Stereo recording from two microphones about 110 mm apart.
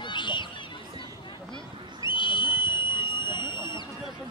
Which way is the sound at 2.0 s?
45° left (ahead or behind).